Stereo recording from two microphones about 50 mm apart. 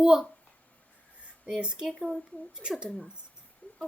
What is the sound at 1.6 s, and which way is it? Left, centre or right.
Speech, centre.